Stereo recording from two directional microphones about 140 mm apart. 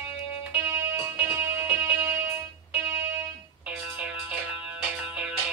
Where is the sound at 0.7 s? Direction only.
20° right (ahead or behind).